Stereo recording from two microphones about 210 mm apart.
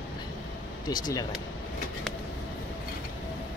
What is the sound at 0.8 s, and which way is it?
Speech, 20° left (ahead or behind).